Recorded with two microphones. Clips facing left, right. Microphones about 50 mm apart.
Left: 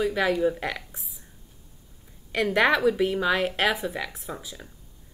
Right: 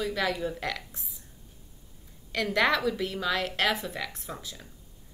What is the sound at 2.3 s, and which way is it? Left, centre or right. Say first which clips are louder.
A woman's voice: left 4 dB; centre.